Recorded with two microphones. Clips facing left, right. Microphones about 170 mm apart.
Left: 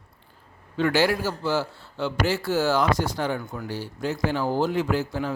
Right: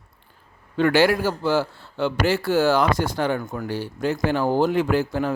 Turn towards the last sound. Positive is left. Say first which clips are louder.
# right 4 dB
turn(degrees=-60)  # may be behind; listen again after turning